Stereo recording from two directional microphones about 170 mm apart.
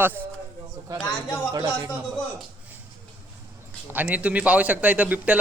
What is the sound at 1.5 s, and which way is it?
Speech, 25° right (ahead or behind).